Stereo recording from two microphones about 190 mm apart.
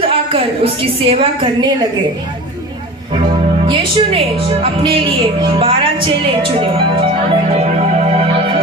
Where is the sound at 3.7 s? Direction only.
30° right (ahead or behind).